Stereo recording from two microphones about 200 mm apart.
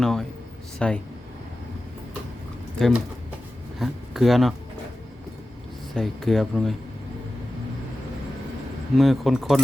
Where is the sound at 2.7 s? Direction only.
Centre (ahead or behind).